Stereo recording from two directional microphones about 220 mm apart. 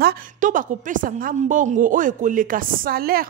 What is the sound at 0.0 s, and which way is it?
A woman's voice, 40° right (ahead or behind).